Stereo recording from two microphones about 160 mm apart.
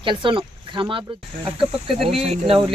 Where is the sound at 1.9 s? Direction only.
Centre (ahead or behind).